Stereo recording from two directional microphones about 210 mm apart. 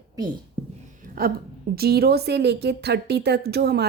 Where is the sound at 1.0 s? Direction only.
45° right (ahead or behind).